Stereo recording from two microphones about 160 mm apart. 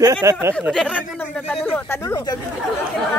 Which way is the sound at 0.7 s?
5° left (ahead or behind).